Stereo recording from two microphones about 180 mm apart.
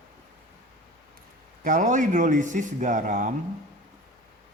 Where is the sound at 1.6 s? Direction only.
45° right (ahead or behind).